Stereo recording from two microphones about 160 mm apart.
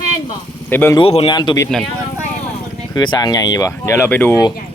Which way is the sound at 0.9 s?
35° left (ahead or behind).